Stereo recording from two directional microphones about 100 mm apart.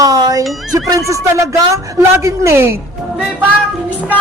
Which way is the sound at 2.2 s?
30° right (ahead or behind).